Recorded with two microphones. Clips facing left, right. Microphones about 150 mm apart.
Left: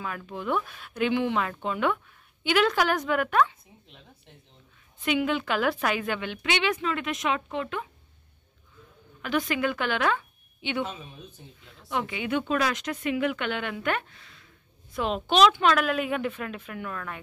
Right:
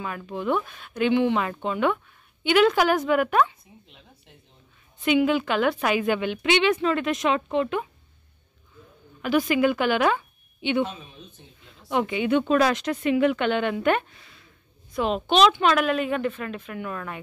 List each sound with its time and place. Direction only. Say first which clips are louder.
0.0 s a woman's voice: right 4 dB; 5° right (ahead or behind)
5.0 s a woman's voice: right 5 dB; centre (ahead or behind); by 7.8 s 25° right (ahead or behind)
9.2 s a woman's voice: right 6 dB; 10° right (ahead or behind)
11.9 s speech: right 6 dB; 25° right (ahead or behind)
14.1 s a woman's voice: right 1 dB; 10° right (ahead or behind)